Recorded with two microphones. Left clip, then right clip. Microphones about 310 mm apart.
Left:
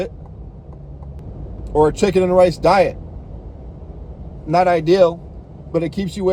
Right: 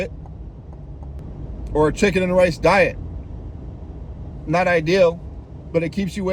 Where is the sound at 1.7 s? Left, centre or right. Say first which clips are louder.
Left 3 dB; left.